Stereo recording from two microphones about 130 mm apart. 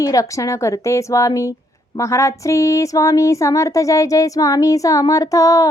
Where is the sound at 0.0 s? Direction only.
25° left (ahead or behind).